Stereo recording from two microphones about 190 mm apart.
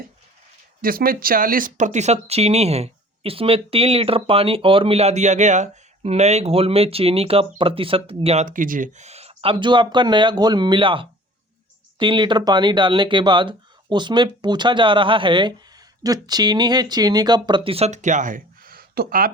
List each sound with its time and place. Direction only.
0.8 s speech: 50° right (ahead or behind)